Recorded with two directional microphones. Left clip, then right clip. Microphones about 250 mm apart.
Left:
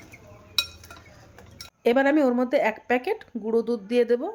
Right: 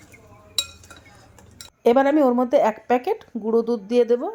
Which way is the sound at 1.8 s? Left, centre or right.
Centre.